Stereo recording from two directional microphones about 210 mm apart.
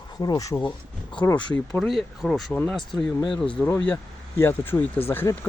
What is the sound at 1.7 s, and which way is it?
Speech, centre (ahead or behind).